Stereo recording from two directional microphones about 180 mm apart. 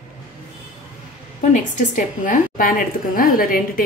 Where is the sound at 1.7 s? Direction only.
45° left (ahead or behind).